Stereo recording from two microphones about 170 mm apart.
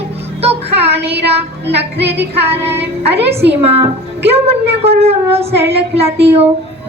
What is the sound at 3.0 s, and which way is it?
A woman's voice, 35° right (ahead or behind).